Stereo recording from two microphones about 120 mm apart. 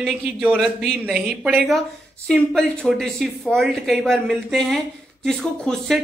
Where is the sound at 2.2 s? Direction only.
5° left (ahead or behind).